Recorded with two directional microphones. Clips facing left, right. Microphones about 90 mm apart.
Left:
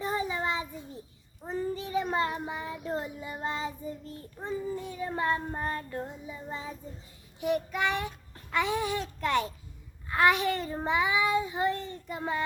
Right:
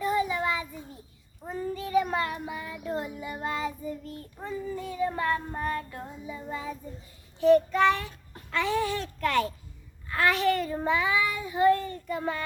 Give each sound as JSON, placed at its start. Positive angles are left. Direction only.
{"t": 0.0, "sound": "child singing", "side_deg": 30}
{"t": 7.3, "sound": "a child's voice", "side_deg": 15}
{"t": 10.1, "sound": "child singing", "side_deg": 20}